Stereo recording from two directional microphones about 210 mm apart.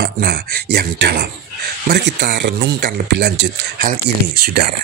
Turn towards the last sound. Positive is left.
turn(degrees=-45)  # may be behind; listen again after turning